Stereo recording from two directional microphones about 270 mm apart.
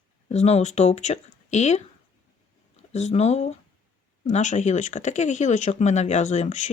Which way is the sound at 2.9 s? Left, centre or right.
Left.